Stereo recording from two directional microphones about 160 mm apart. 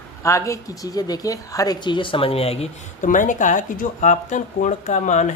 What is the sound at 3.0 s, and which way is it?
Speech, 55° left (ahead or behind).